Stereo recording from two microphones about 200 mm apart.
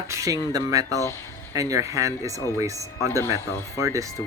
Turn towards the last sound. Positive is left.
turn(degrees=-15)  # may be behind; listen again after turning